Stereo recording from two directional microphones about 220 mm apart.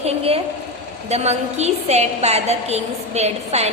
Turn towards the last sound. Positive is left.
turn(degrees=-30)  # may be behind; listen again after turning